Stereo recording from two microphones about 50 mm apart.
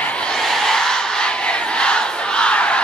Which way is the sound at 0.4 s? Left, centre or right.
Centre.